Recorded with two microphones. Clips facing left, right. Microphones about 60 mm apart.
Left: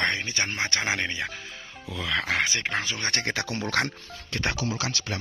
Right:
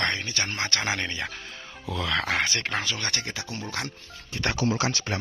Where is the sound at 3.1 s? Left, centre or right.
Left.